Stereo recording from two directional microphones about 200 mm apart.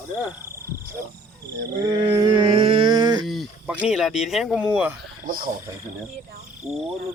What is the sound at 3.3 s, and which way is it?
Speech, 5° right (ahead or behind).